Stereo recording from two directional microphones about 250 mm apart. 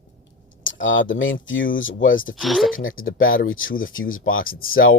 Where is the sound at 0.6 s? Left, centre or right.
Left.